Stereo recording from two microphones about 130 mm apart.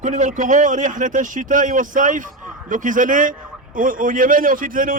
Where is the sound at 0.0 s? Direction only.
75° right (ahead or behind).